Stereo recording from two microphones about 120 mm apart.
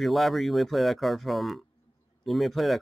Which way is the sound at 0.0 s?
Centre (ahead or behind).